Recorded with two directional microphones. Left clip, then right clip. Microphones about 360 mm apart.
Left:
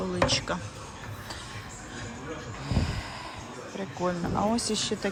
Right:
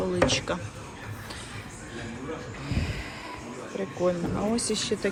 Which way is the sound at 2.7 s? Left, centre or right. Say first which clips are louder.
Left 1 dB; centre.